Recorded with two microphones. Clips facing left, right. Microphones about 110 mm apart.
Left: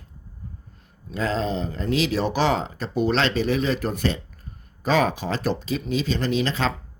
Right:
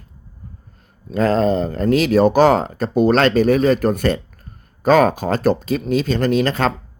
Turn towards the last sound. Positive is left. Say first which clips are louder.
# right 7 dB
turn(degrees=-50)  # may be behind; listen again after turning